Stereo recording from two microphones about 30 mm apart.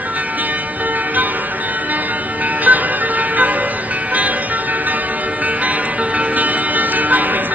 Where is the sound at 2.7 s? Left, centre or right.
Right.